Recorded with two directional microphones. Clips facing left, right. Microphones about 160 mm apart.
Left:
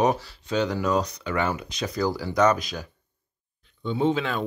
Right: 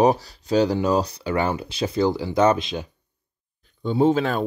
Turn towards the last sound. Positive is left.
turn(degrees=-45)  # may be behind; listen again after turning